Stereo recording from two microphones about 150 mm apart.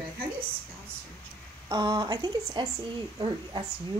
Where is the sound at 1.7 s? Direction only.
30° right (ahead or behind).